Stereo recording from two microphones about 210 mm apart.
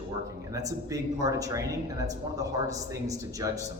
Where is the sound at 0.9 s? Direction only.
15° right (ahead or behind).